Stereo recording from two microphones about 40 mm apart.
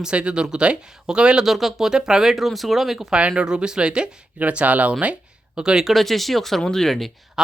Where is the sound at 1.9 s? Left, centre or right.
Centre.